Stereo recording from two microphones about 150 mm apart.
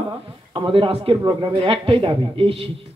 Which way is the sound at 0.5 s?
35° right (ahead or behind).